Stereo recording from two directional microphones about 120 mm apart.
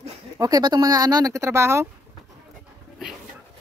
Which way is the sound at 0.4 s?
30° right (ahead or behind).